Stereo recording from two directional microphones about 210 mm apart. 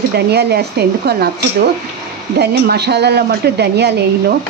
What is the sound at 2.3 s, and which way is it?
Speech, 50° right (ahead or behind).